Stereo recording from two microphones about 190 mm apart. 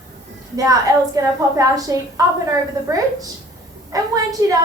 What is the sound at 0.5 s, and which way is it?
A woman's voice, 20° right (ahead or behind).